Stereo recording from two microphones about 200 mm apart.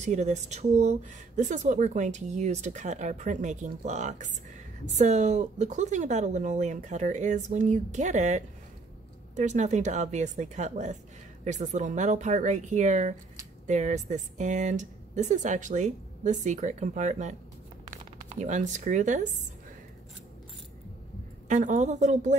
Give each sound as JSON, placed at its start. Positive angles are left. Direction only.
{"t": 0.0, "sound": "speech", "side_deg": -35}
{"t": 18.4, "sound": "speech", "side_deg": -35}
{"t": 21.5, "sound": "speech", "side_deg": -40}